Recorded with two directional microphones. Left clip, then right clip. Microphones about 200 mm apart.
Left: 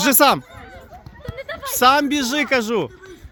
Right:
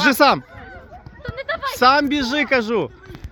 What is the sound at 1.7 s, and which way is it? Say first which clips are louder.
Speech: even; 20° left (ahead or behind).